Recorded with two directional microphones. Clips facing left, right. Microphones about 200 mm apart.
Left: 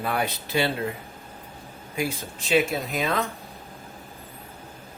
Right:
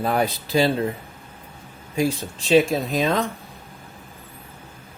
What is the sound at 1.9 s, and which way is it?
Speech, 35° right (ahead or behind).